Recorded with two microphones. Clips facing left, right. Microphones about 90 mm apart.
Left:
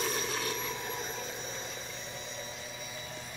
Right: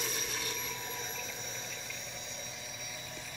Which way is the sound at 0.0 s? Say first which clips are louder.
Left 6 dB; 55° left (ahead or behind).